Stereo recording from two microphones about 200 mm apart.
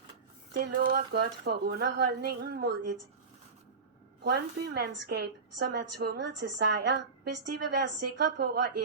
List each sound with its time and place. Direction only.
0.6 s a woman's voice: 50° right (ahead or behind)
4.2 s a woman's voice: 55° right (ahead or behind)